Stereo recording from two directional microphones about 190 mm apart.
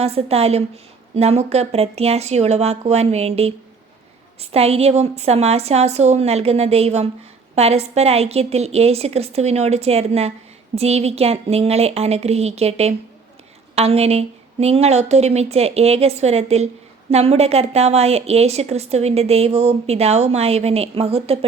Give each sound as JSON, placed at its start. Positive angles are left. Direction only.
{"t": 0.0, "sound": "a woman's voice", "side_deg": -30}